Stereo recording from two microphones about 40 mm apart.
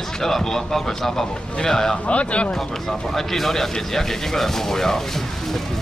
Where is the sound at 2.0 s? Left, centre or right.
Left.